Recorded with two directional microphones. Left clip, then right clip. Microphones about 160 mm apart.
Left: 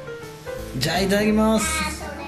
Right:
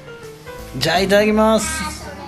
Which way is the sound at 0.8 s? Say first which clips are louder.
Right 7 dB; 10° right (ahead or behind).